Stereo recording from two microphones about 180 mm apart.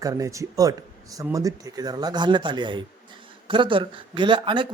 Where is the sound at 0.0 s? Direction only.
20° right (ahead or behind).